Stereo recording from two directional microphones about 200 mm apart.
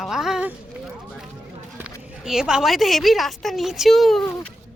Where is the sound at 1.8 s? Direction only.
10° right (ahead or behind).